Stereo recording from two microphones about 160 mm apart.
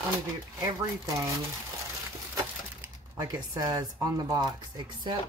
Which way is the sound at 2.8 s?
20° right (ahead or behind).